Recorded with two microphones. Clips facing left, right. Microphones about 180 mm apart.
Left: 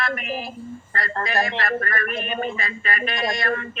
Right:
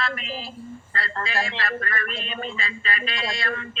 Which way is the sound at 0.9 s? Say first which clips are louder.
Left 4 dB; 45° left (ahead or behind).